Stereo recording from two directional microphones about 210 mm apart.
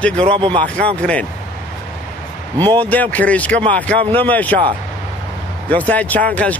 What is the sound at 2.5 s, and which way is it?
Speech, 10° left (ahead or behind).